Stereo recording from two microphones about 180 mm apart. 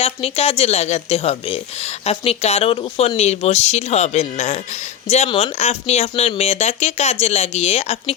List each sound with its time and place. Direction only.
0.0 s a woman's voice: 35° left (ahead or behind)